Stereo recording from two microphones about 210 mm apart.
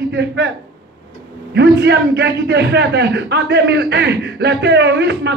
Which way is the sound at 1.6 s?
55° right (ahead or behind).